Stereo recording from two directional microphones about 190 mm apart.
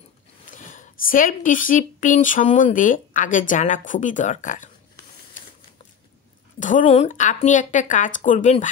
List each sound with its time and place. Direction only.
0.5 s speech: 45° left (ahead or behind)
6.6 s a woman's voice: 40° left (ahead or behind)